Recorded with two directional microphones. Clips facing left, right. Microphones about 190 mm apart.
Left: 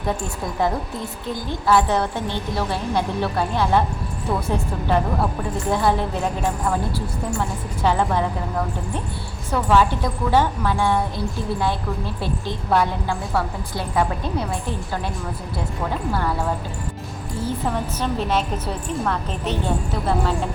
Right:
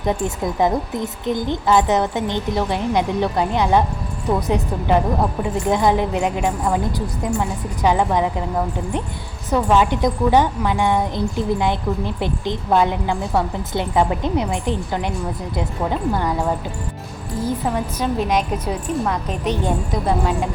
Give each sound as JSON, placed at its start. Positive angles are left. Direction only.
{"t": 0.0, "sound": "a woman's voice", "side_deg": -20}
{"t": 9.5, "sound": "a woman's voice", "side_deg": -15}
{"t": 17.4, "sound": "a woman's voice", "side_deg": -10}